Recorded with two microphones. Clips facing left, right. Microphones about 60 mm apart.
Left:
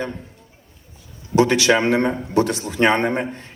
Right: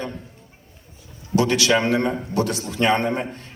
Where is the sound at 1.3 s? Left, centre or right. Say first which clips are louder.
Left 3 dB; left.